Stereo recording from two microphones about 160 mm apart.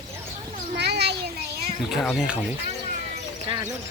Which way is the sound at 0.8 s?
90° right.